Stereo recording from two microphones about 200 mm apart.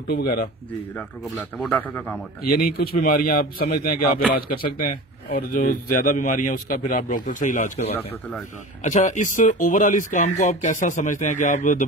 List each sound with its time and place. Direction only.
0.1 s speech: 50° left (ahead or behind)
0.9 s speech: 5° left (ahead or behind)
2.4 s speech: 50° left (ahead or behind)